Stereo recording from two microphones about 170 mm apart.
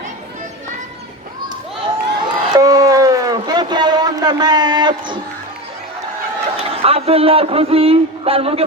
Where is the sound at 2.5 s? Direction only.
20° right (ahead or behind).